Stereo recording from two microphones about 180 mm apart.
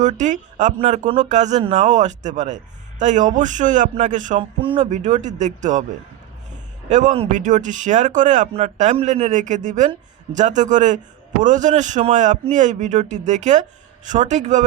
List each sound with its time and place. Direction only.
0.0 s a man's voice: 40° right (ahead or behind)
6.8 s a man's voice: 45° right (ahead or behind)